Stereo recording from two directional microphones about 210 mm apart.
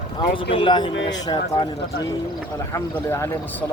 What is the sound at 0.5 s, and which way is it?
Speech, 20° left (ahead or behind).